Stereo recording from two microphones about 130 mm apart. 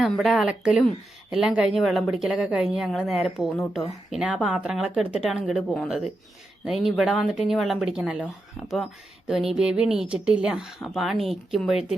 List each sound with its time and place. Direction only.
0.0 s speech: centre (ahead or behind)